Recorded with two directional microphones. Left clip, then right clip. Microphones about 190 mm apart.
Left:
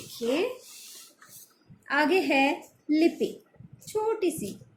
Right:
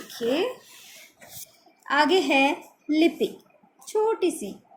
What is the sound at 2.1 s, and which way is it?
A woman's voice, 25° right (ahead or behind).